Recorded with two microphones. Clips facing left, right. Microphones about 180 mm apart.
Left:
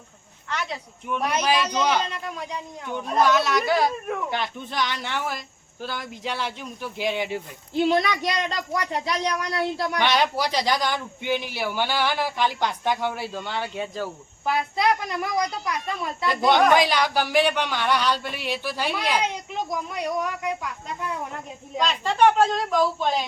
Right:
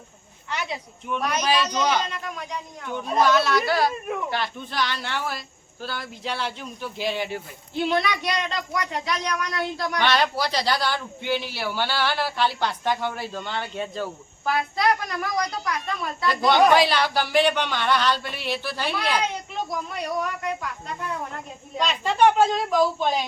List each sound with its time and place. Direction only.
0.5 s speech: 5° right (ahead or behind)
1.4 s a man's voice: 10° left (ahead or behind)
2.0 s a woman's voice: 30° left (ahead or behind)
3.1 s a woman's voice: centre (ahead or behind)
3.3 s a man's voice: 15° left (ahead or behind)
4.0 s a woman's voice: 5° right (ahead or behind)
4.3 s a man's voice: 20° left (ahead or behind)
7.9 s speech: 40° left (ahead or behind)
10.0 s a man's voice: 15° left (ahead or behind)
14.4 s a woman's voice: 20° left (ahead or behind)
21.3 s a woman's voice: centre (ahead or behind)